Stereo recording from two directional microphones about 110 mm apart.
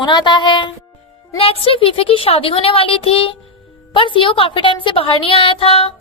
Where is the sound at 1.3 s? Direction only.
60° left (ahead or behind).